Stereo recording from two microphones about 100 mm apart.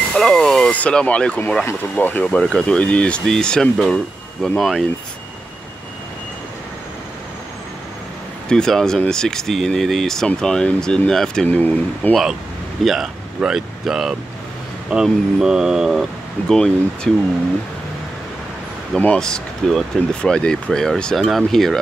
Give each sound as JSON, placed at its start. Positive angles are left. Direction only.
{"t": 0.1, "sound": "speech", "side_deg": 5}
{"t": 8.5, "sound": "speech", "side_deg": 5}
{"t": 12.1, "sound": "speech", "side_deg": 0}
{"t": 18.9, "sound": "speech", "side_deg": 10}